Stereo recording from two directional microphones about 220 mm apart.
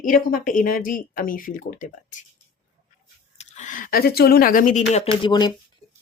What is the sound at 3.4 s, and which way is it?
Speech, 35° left (ahead or behind).